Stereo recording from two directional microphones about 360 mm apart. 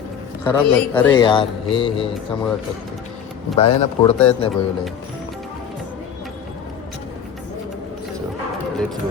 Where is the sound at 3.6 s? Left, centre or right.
Centre.